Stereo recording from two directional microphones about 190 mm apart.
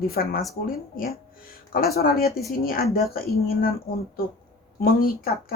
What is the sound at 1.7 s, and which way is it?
Speech, 50° left (ahead or behind).